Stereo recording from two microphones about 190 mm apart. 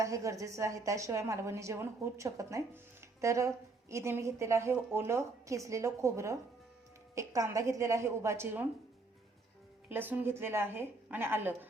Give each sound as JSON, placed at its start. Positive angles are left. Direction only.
{"t": 0.0, "sound": "a woman's voice", "side_deg": -15}
{"t": 9.9, "sound": "a woman's voice", "side_deg": -10}